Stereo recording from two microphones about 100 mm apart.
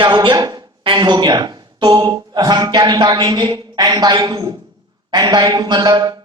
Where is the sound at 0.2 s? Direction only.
45° right (ahead or behind).